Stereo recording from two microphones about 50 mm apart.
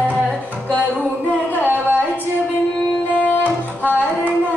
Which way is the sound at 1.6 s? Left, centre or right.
Right.